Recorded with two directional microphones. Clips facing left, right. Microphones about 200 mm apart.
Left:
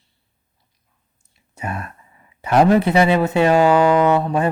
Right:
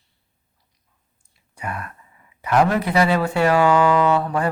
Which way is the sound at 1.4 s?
25° left (ahead or behind).